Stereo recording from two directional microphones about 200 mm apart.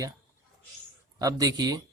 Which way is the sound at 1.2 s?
20° right (ahead or behind).